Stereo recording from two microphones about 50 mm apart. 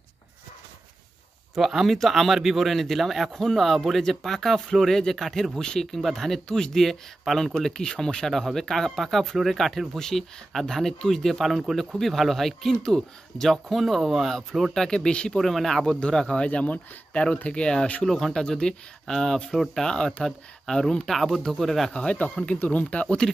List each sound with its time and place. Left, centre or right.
1.7 s speech: centre
7.6 s speech: centre
14.7 s speech: centre
15.3 s speech: centre
16.4 s speech: left
18.0 s speech: centre
21.1 s speech: centre
21.9 s speech: left